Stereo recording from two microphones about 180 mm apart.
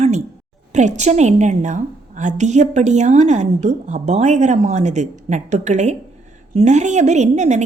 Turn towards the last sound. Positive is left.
turn(degrees=-40)  # may be behind; listen again after turning